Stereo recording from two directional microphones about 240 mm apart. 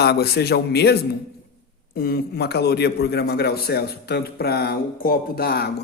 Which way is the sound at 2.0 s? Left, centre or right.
Left.